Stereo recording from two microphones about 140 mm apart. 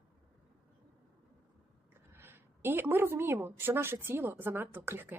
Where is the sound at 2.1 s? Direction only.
15° right (ahead or behind).